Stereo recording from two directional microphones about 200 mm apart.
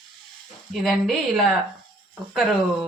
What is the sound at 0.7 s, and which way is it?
Speech, centre (ahead or behind).